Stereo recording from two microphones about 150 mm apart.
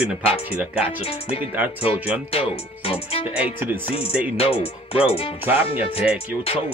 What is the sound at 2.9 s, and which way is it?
Speech, 40° left (ahead or behind).